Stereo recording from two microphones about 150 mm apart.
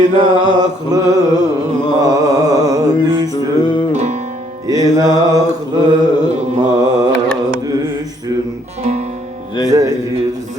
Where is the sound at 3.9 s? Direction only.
50° right (ahead or behind).